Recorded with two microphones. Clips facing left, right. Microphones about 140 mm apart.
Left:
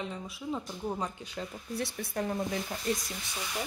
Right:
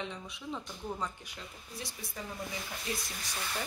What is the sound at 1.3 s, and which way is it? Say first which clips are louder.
Speech: left 10 dB; 65° left (ahead or behind).